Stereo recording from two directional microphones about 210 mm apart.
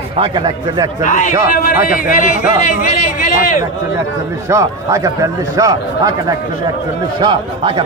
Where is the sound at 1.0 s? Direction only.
35° left (ahead or behind).